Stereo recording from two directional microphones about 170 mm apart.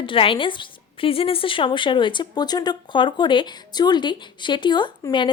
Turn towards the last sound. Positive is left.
turn(degrees=30)  # may be behind; listen again after turning